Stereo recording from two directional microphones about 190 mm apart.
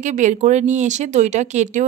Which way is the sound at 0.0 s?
40° right (ahead or behind).